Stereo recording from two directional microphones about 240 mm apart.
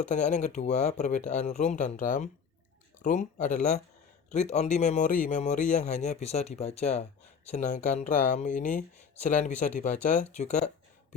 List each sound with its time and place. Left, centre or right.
0.1 s a man's voice: left